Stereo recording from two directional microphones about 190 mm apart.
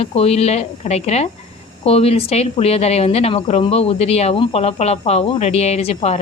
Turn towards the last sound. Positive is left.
turn(degrees=35)  # may be behind; listen again after turning